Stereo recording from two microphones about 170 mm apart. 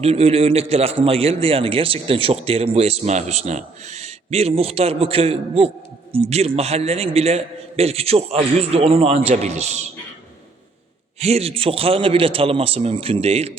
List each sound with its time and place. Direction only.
0.0 s speech: 35° right (ahead or behind)
11.2 s speech: 35° right (ahead or behind)